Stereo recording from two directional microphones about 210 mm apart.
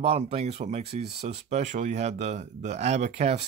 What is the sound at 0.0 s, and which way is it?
Speech, 30° right (ahead or behind).